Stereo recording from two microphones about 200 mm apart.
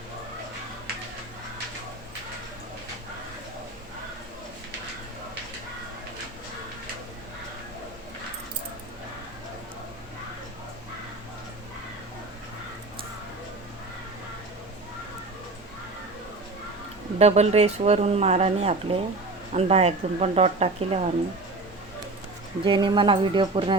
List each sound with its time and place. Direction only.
17.2 s speech: 30° right (ahead or behind)
22.6 s speech: 25° right (ahead or behind)